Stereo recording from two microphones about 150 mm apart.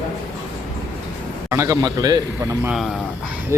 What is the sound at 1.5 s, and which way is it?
Speech, 20° right (ahead or behind).